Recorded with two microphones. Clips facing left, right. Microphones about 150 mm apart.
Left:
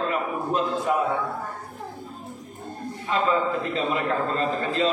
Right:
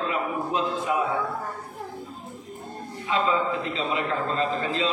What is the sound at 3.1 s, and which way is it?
A man's voice, 45° left (ahead or behind).